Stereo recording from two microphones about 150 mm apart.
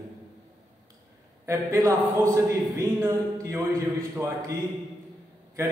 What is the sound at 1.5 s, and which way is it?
A man's voice, 25° right (ahead or behind).